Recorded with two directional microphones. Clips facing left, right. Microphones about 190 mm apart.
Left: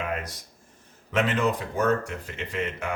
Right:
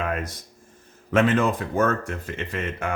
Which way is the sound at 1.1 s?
50° right (ahead or behind).